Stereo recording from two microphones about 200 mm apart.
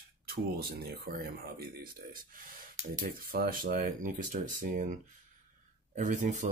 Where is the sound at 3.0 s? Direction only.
45° right (ahead or behind).